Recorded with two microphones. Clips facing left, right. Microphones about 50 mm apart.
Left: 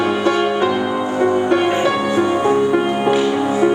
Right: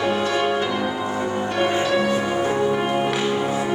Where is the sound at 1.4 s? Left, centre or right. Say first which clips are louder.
Left 6 dB; left.